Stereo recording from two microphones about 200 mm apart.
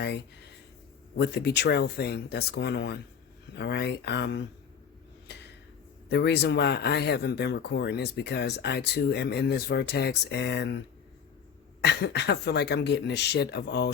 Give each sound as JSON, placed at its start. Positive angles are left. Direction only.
{"t": 1.1, "sound": "speech", "side_deg": 55}
{"t": 6.1, "sound": "speech", "side_deg": 55}